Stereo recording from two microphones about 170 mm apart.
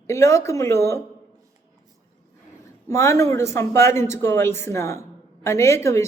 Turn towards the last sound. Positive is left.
turn(degrees=15)  # may be behind; listen again after turning